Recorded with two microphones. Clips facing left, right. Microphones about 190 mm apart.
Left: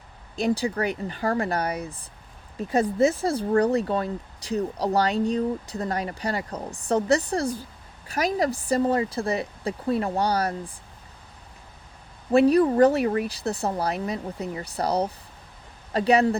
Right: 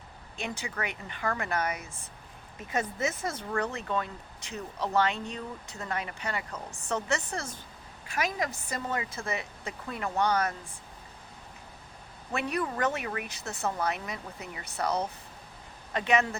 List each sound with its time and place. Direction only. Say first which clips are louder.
0.3 s speech: left 12 dB; 35° left (ahead or behind)
12.3 s speech: left 14 dB; 35° left (ahead or behind)